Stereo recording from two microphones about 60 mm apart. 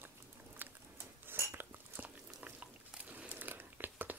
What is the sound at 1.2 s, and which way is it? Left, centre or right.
Cutlery, right.